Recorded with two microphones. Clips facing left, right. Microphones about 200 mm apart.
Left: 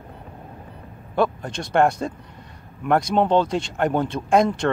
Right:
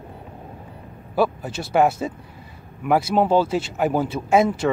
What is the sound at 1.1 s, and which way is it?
Speech, 5° right (ahead or behind).